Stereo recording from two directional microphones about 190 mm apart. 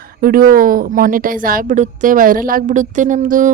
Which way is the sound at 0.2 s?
50° right (ahead or behind).